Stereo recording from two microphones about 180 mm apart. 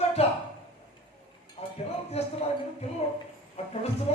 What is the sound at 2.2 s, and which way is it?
Speech, 35° left (ahead or behind).